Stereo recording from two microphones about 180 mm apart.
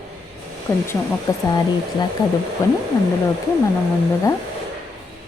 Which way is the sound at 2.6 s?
20° left (ahead or behind).